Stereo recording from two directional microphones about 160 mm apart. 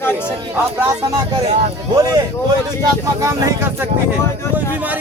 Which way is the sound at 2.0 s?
25° right (ahead or behind).